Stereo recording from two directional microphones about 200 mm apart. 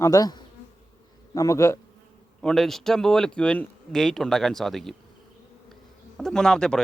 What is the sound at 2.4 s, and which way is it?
Speech, 5° left (ahead or behind).